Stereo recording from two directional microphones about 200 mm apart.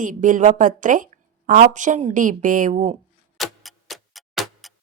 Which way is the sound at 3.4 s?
Centre (ahead or behind).